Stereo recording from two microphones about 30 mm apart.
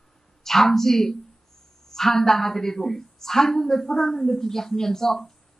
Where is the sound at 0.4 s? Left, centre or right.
Centre.